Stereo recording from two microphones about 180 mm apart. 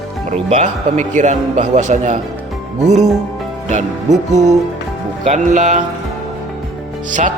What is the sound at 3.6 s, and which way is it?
A man's voice, 40° right (ahead or behind).